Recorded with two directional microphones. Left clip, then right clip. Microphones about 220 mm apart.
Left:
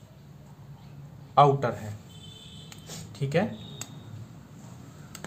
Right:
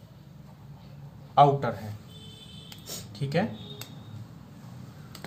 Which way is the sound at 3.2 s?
15° left (ahead or behind).